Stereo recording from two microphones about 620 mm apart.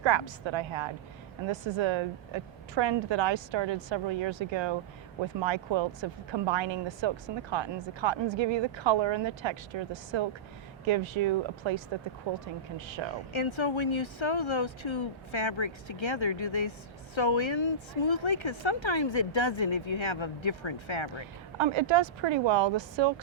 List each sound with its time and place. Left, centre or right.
0.0 s speech: right
13.3 s speech: left
21.6 s speech: right